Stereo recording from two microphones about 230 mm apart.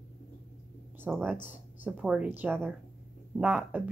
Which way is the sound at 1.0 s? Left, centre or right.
Centre.